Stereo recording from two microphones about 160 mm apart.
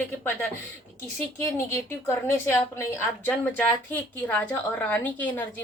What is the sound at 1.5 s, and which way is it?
A woman's voice, 15° left (ahead or behind).